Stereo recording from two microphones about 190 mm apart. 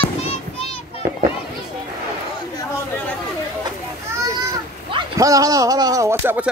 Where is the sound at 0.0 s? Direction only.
35° left (ahead or behind).